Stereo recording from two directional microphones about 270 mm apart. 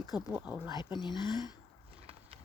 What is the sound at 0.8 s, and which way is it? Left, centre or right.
Speech, centre.